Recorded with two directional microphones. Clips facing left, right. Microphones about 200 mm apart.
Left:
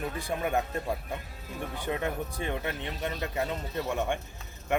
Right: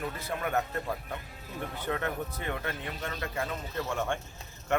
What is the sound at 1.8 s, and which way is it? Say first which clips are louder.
Speech: left 1 dB; 15° left (ahead or behind).